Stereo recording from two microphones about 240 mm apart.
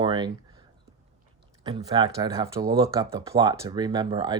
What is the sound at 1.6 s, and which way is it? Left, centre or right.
Speech, centre.